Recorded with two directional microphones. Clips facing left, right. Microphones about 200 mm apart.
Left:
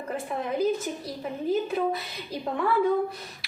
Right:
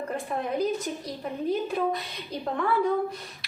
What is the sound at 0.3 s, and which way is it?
A woman's voice, centre (ahead or behind).